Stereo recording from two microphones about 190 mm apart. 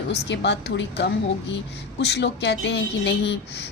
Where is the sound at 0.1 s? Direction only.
65° left (ahead or behind).